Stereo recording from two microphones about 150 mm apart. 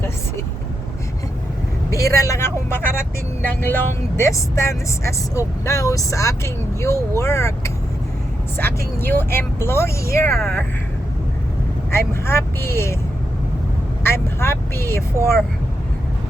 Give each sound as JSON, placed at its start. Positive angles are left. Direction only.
{"t": 1.9, "sound": "speech", "side_deg": 20}
{"t": 10.2, "sound": "speech", "side_deg": 0}
{"t": 11.9, "sound": "speech", "side_deg": 15}
{"t": 14.0, "sound": "speech", "side_deg": 15}